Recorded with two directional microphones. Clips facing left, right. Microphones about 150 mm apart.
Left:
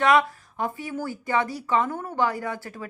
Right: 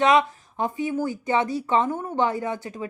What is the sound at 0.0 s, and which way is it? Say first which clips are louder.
Speech: right 1 dB; 20° right (ahead or behind).